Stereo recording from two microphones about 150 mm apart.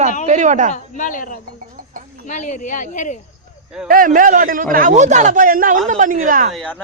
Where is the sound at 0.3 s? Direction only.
55° right (ahead or behind).